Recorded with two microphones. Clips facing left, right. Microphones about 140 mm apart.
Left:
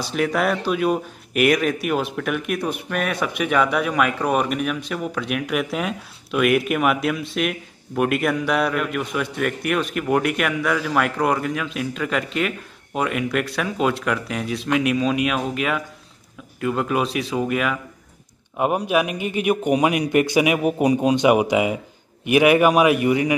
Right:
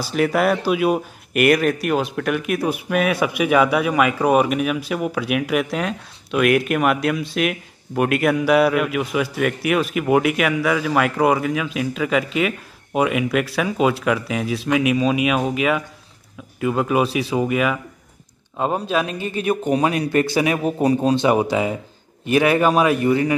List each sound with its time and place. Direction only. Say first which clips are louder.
0.0 s speech: right 3 dB; 5° right (ahead or behind)
18.6 s speech: left 1 dB; 15° left (ahead or behind)